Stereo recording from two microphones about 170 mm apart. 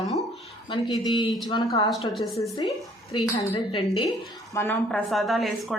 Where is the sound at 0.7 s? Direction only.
25° left (ahead or behind).